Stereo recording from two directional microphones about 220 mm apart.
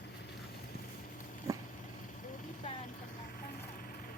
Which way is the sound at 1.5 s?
15° right (ahead or behind).